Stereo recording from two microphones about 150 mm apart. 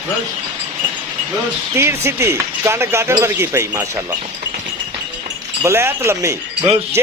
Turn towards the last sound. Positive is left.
turn(degrees=-45)  # may be behind; listen again after turning